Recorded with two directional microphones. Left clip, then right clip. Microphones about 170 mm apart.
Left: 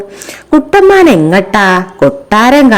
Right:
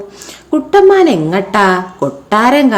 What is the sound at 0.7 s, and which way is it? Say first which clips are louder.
A woman's voice: left 2 dB; 35° left (ahead or behind).